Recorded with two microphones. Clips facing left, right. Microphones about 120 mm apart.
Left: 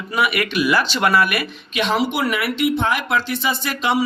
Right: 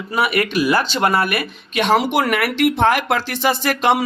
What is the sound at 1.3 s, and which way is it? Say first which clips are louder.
Speech: right 1 dB; 45° right (ahead or behind).